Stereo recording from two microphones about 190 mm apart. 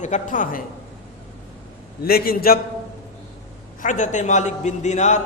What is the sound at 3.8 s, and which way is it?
A man's voice, 40° left (ahead or behind).